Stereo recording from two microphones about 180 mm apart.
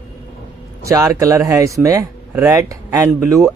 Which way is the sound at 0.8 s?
20° right (ahead or behind).